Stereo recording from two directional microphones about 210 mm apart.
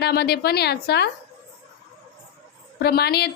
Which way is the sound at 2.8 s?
50° left (ahead or behind).